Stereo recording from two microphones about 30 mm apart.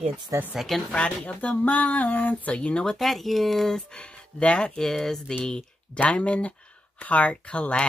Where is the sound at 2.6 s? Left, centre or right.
Left.